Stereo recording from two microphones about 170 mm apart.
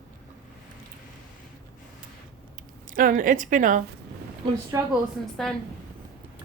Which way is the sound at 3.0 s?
55° right (ahead or behind).